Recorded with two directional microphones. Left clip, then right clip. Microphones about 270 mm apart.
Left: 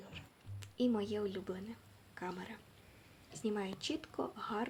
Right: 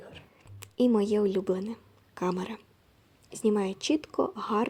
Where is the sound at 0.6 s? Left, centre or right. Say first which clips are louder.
Right 10 dB; right.